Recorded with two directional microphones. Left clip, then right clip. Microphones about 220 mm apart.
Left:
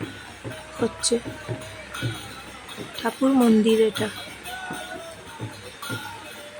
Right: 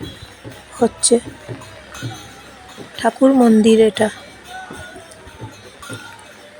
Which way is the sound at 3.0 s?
15° right (ahead or behind).